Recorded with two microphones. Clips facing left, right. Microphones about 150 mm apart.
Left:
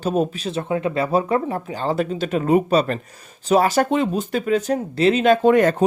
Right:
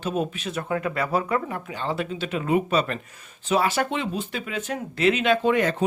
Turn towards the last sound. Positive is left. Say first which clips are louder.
# left 6 dB
turn(degrees=45)  # may be behind; listen again after turning